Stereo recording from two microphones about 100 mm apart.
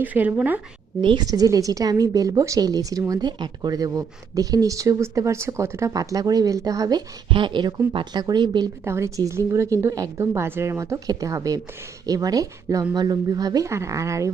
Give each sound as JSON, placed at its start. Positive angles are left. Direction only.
{"t": 0.0, "sound": "a woman's voice", "side_deg": -15}
{"t": 1.0, "sound": "speech", "side_deg": -45}
{"t": 7.3, "sound": "speech", "side_deg": -55}
{"t": 8.8, "sound": "speech", "side_deg": -30}